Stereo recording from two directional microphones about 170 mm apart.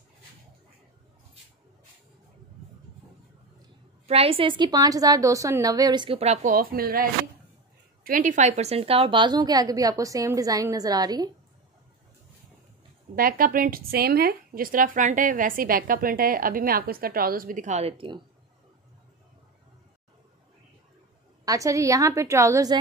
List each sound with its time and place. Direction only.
4.1 s a woman's voice: 35° right (ahead or behind)
6.5 s a woman's voice: 60° right (ahead or behind); by 11.2 s 25° right (ahead or behind)
13.1 s a woman's voice: 55° right (ahead or behind); by 18.2 s 30° right (ahead or behind)
21.5 s a woman's voice: 20° right (ahead or behind)